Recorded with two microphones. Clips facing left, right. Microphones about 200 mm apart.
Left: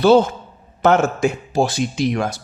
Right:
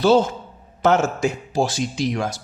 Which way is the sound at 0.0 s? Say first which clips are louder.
Left 3 dB; 60° left (ahead or behind).